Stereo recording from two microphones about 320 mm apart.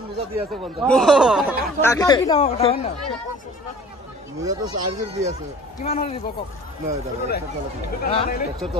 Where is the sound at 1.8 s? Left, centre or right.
Centre.